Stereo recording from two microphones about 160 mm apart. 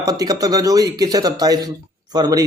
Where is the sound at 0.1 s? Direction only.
20° right (ahead or behind).